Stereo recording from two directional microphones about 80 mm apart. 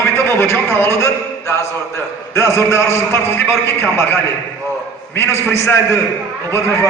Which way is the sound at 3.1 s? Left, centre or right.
Left.